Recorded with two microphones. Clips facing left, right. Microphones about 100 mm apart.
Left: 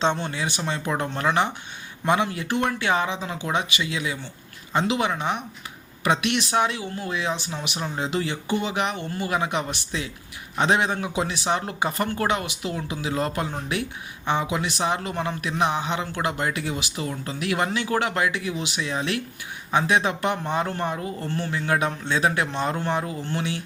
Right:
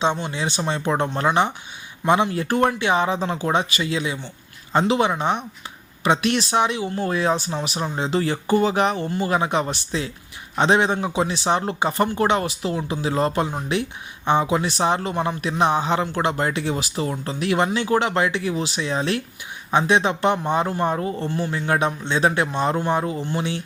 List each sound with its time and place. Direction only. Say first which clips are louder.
0.0 s speech: right 1 dB; 10° right (ahead or behind)
0.3 s speech: right 3 dB; 25° right (ahead or behind)
2.7 s speech: right 3 dB; 20° right (ahead or behind)
3.1 s speech: right 6 dB; 40° right (ahead or behind); by 6.8 s 20° right (ahead or behind)
6.8 s speech: right 6 dB; 35° right (ahead or behind)
12.4 s speech: right 5 dB; 35° right (ahead or behind)
20.8 s speech: right 5 dB; 30° right (ahead or behind)
21.2 s speech: even; 15° right (ahead or behind)